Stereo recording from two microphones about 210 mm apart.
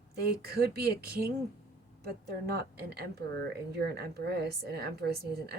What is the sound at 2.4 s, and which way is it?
Speech, 50° right (ahead or behind).